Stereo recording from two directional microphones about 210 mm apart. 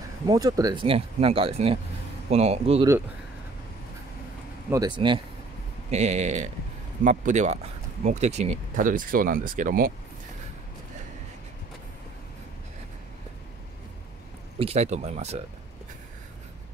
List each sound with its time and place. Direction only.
0.3 s speech: 15° right (ahead or behind)
4.6 s speech: 20° right (ahead or behind); by 9.9 s 40° right (ahead or behind)
14.6 s speech: 30° right (ahead or behind)